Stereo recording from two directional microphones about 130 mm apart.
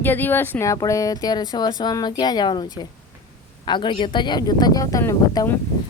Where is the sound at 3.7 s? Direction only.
35° left (ahead or behind).